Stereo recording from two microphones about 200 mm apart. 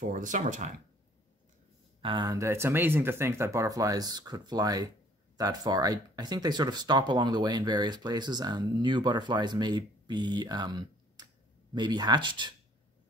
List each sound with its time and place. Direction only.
0.0 s speech: 40° right (ahead or behind)
2.0 s speech: 25° right (ahead or behind)